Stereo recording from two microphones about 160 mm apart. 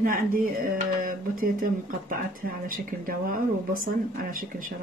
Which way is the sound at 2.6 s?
60° right (ahead or behind).